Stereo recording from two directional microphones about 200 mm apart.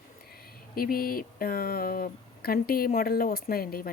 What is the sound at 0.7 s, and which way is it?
Speech, 45° left (ahead or behind).